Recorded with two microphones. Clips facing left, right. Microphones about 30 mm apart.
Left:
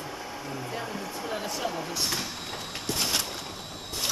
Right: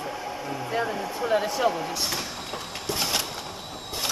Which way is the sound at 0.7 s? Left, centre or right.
Centre.